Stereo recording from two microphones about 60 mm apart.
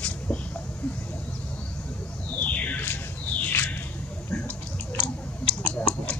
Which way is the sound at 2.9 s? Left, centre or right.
Left.